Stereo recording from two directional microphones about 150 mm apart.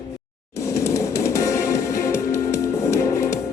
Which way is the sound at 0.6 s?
20° left (ahead or behind).